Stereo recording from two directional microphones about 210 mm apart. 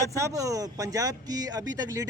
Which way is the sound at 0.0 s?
15° right (ahead or behind).